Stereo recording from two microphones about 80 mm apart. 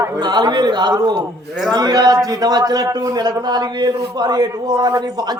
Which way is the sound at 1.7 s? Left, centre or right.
Right.